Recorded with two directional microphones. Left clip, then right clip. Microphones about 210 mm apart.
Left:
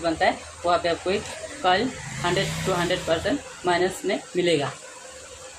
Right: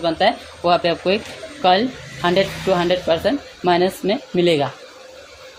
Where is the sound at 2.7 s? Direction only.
40° right (ahead or behind).